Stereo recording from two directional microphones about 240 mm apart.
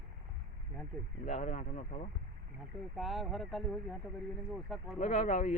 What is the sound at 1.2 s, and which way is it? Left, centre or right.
Speech, left.